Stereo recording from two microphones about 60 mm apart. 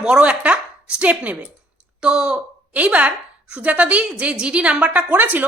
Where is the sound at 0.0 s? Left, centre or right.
Centre.